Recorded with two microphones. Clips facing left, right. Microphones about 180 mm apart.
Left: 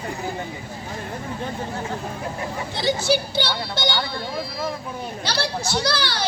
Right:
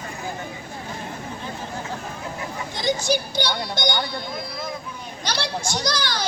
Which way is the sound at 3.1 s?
15° right (ahead or behind).